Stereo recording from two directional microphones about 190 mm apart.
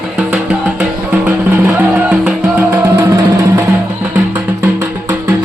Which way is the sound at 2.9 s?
20° right (ahead or behind).